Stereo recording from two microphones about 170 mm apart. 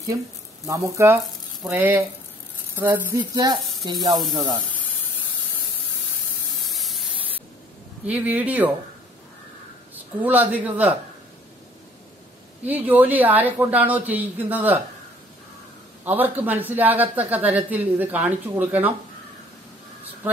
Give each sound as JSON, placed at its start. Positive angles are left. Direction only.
{"t": 0.1, "sound": "speech", "side_deg": -25}
{"t": 3.2, "sound": "speech", "side_deg": -25}
{"t": 4.2, "sound": "speech", "side_deg": 0}
{"t": 6.6, "sound": "spray", "side_deg": 0}
{"t": 8.0, "sound": "speech", "side_deg": -10}
{"t": 9.9, "sound": "speech", "side_deg": -10}
{"t": 12.6, "sound": "speech", "side_deg": -10}
{"t": 16.0, "sound": "speech", "side_deg": -10}